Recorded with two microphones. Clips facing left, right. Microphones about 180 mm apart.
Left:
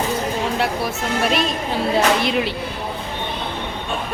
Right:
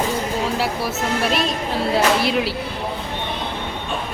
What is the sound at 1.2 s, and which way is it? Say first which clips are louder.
A woman's voice: left 3 dB; centre (ahead or behind).